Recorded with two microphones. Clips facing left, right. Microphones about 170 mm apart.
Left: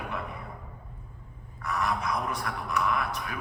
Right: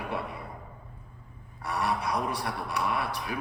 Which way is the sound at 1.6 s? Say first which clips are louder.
Even; 35° right (ahead or behind).